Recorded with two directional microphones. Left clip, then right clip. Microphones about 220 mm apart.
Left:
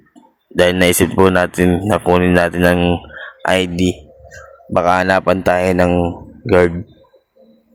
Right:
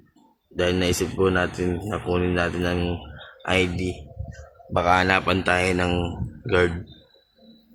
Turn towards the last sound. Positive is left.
turn(degrees=35)  # may be behind; listen again after turning